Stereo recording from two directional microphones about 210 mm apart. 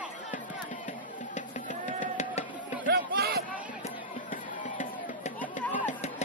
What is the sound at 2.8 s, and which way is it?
Crowd, 55° right (ahead or behind).